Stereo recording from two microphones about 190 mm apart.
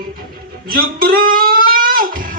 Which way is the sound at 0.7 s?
50° right (ahead or behind).